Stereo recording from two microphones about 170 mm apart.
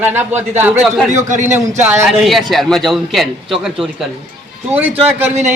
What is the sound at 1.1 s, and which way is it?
Speech, 45° right (ahead or behind).